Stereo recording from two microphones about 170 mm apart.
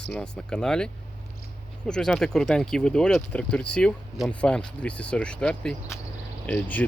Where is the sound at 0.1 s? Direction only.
5° left (ahead or behind).